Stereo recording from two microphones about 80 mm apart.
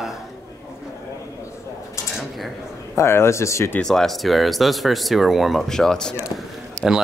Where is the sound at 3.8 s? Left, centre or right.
Centre.